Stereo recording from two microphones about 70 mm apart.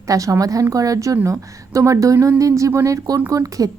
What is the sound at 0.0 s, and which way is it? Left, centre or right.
A woman's voice, right.